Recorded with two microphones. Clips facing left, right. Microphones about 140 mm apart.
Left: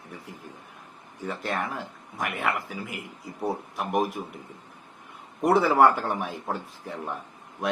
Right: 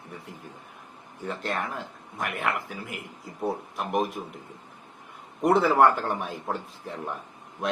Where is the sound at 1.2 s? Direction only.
5° left (ahead or behind).